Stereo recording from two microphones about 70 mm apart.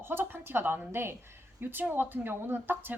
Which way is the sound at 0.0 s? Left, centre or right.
Right.